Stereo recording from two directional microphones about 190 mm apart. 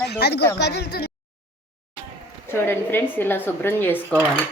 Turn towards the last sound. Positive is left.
turn(degrees=10)  # may be behind; listen again after turning